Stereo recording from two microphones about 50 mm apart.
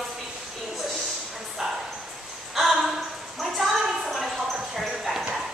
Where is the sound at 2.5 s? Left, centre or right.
Centre.